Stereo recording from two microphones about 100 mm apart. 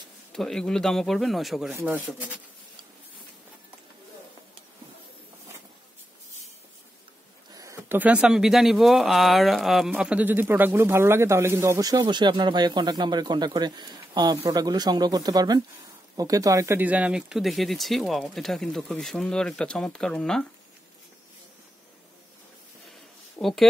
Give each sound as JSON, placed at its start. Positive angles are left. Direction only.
{"t": 0.3, "sound": "speech", "side_deg": 5}
{"t": 1.7, "sound": "speech", "side_deg": -25}
{"t": 7.5, "sound": "a sound", "side_deg": -30}
{"t": 7.9, "sound": "speech", "side_deg": -15}
{"t": 9.8, "sound": "speech", "side_deg": -15}
{"t": 16.7, "sound": "speech", "side_deg": -15}
{"t": 23.4, "sound": "speech", "side_deg": 5}